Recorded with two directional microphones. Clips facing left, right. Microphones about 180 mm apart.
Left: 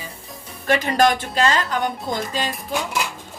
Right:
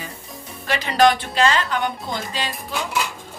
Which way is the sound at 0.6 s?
50° left (ahead or behind).